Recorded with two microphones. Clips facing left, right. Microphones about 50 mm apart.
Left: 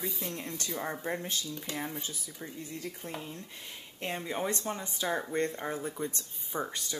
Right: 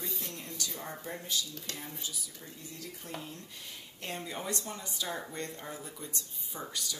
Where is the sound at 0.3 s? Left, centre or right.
Left.